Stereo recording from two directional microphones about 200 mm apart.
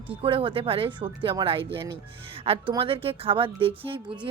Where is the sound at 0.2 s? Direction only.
25° right (ahead or behind).